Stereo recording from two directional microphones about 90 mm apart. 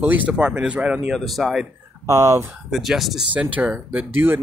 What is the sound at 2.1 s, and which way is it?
Speech, 35° right (ahead or behind).